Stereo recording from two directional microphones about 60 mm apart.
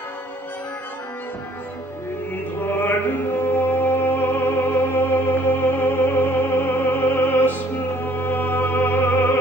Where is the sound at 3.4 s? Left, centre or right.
Left.